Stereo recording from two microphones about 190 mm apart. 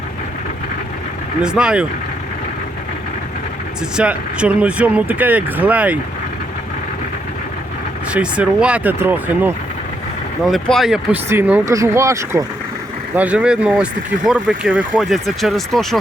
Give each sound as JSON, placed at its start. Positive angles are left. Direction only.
{"t": 1.4, "sound": "speech", "side_deg": -5}
{"t": 3.9, "sound": "speech", "side_deg": -5}
{"t": 8.1, "sound": "speech", "side_deg": -5}